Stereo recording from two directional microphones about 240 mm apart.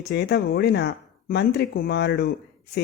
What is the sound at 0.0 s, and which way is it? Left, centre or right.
A woman's voice, left.